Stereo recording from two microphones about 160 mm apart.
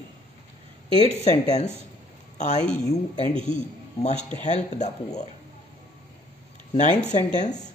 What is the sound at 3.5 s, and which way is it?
Speech, 50° left (ahead or behind).